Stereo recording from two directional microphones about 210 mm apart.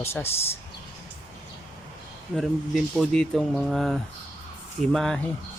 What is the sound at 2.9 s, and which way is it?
Speech, centre (ahead or behind).